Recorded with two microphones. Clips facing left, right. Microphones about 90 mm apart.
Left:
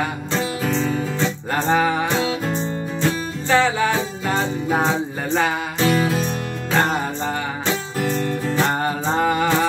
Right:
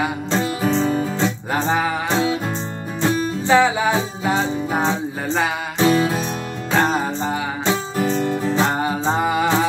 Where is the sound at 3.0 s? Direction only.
15° right (ahead or behind).